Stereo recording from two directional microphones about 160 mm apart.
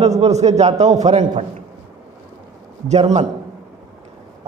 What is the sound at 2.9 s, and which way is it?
Speech, 45° right (ahead or behind).